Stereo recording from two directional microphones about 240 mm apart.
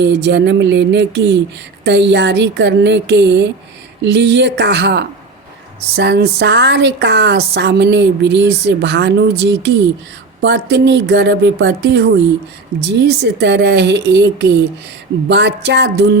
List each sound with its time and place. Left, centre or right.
0.0 s a woman's voice: right